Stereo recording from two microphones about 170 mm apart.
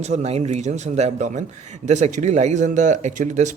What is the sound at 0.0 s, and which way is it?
A man's voice, 40° right (ahead or behind).